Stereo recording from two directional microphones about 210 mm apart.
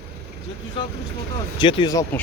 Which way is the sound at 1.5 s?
25° left (ahead or behind).